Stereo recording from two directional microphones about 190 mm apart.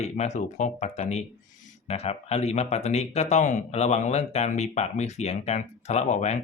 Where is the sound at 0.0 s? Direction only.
35° left (ahead or behind).